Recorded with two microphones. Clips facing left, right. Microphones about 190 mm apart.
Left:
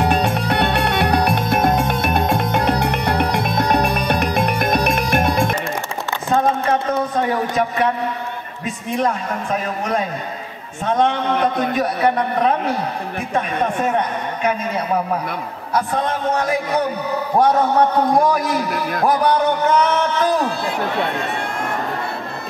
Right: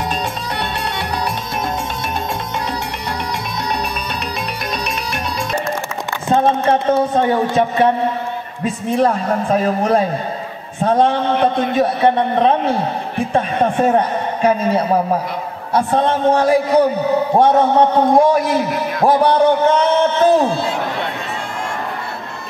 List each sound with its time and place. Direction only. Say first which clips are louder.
0.0 s music: left 5 dB; 60° left (ahead or behind)
6.3 s a man's voice: right 3 dB; 30° right (ahead or behind)